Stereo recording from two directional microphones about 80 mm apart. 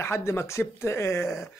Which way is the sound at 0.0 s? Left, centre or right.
Left.